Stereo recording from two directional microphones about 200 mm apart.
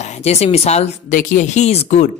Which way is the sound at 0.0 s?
35° left (ahead or behind).